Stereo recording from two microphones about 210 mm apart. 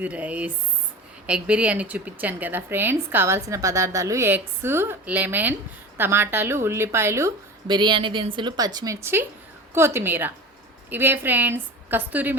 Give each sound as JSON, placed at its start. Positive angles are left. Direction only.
{"t": 0.0, "sound": "a woman's voice", "side_deg": -5}